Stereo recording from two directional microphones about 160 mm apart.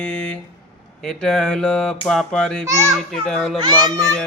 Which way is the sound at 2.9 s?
Centre (ahead or behind).